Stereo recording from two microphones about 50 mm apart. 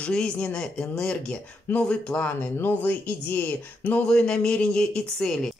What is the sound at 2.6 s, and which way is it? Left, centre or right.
Speech, left.